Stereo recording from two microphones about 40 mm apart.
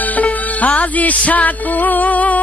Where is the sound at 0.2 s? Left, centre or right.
Left.